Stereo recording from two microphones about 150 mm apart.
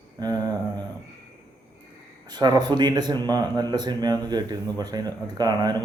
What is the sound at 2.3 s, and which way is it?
Speech, 30° right (ahead or behind).